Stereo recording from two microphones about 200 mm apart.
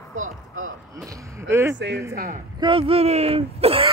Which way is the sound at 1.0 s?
15° right (ahead or behind).